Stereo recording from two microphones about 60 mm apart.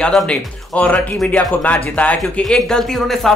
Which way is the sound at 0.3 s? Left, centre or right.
Left.